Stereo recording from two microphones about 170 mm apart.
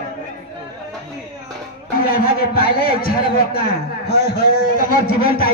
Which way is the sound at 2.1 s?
60° left (ahead or behind).